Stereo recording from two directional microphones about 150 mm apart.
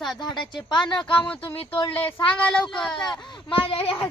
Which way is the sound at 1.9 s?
10° left (ahead or behind).